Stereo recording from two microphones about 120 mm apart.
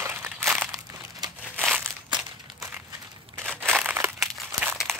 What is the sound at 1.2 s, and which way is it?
Crumpling, 35° right (ahead or behind).